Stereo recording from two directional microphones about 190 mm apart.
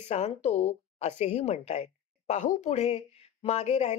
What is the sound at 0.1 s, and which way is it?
A woman's voice, 35° left (ahead or behind).